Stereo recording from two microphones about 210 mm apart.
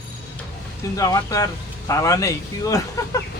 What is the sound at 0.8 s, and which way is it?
Speech, 15° left (ahead or behind).